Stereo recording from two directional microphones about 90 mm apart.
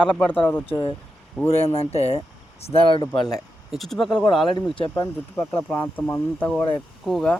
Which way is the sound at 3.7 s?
Centre (ahead or behind).